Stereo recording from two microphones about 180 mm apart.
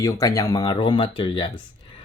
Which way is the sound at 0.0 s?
20° left (ahead or behind).